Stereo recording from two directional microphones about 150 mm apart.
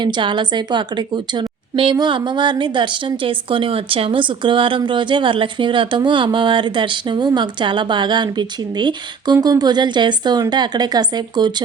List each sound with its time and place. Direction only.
0.0 s a woman's voice: 30° right (ahead or behind)